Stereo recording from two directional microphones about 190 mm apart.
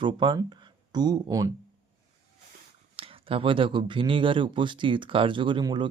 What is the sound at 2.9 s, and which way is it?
Speech, 30° right (ahead or behind).